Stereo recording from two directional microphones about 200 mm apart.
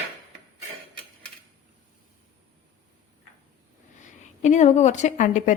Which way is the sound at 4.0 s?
35° left (ahead or behind).